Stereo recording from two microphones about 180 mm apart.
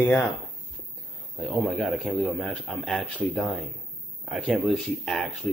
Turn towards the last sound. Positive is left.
turn(degrees=0)  # may be behind; listen again after turning